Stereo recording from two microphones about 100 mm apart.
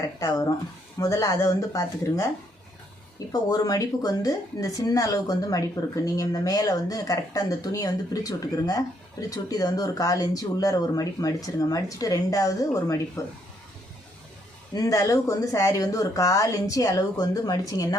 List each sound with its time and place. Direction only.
0.2 s speech: 40° left (ahead or behind)
3.3 s speech: 40° left (ahead or behind)
14.7 s speech: 35° left (ahead or behind)